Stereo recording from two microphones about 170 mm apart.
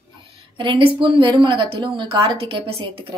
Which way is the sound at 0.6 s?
30° right (ahead or behind).